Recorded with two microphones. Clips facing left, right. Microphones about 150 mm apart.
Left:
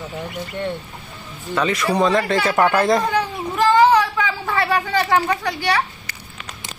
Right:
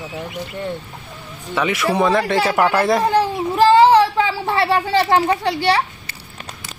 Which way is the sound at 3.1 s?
30° right (ahead or behind).